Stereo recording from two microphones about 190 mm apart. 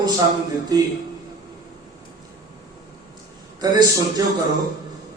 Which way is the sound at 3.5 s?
20° right (ahead or behind).